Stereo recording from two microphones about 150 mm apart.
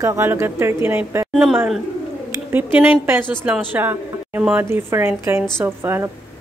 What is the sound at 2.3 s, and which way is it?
A woman's voice, 15° right (ahead or behind).